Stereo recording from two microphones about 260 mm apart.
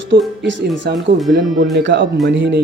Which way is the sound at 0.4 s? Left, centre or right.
Right.